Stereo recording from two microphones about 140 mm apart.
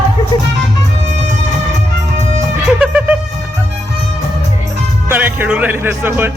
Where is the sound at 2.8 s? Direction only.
10° right (ahead or behind).